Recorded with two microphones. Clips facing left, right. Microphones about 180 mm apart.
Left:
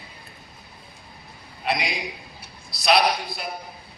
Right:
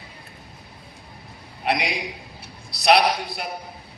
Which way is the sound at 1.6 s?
65° right (ahead or behind).